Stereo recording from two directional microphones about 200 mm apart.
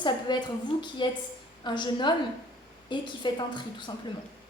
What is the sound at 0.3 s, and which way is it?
A woman's voice, 25° left (ahead or behind).